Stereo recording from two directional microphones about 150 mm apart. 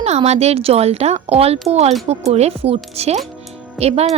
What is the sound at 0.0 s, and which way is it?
Speech, 45° right (ahead or behind).